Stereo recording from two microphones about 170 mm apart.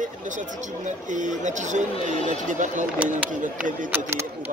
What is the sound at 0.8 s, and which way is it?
Speech, 45° right (ahead or behind).